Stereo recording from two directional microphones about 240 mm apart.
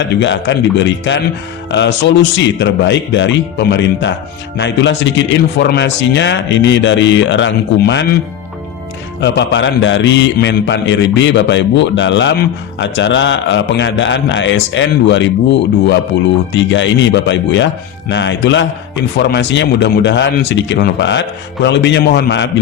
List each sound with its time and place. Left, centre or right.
0.1 s a man's voice: left
9.2 s a man's voice: left
16.5 s a man's voice: left